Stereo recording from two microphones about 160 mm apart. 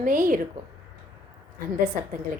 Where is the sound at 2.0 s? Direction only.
60° right (ahead or behind).